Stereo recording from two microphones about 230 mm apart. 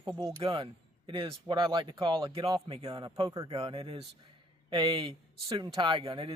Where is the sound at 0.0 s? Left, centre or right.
Centre.